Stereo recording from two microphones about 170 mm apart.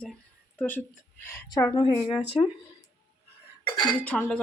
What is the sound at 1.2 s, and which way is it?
Speech, 20° left (ahead or behind).